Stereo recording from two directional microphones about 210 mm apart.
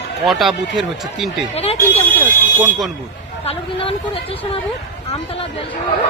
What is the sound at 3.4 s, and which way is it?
Speech, 25° left (ahead or behind).